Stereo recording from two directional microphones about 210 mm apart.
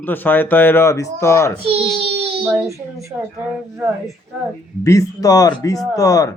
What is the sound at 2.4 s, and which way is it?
Speech, 5° right (ahead or behind).